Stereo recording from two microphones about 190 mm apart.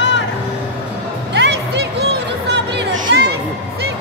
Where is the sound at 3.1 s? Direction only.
60° right (ahead or behind).